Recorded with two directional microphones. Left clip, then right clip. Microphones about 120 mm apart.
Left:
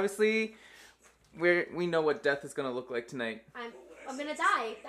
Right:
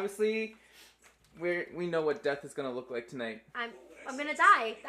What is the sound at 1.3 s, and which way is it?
Speech, 50° left (ahead or behind).